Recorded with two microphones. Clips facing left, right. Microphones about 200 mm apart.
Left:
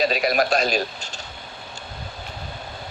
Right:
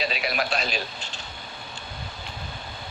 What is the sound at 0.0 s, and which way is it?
Speech, 45° left (ahead or behind).